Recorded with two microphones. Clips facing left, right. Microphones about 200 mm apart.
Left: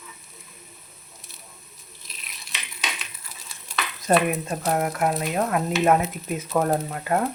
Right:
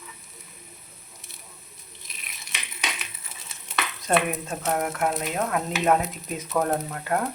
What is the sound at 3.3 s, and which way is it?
Stir, 25° right (ahead or behind).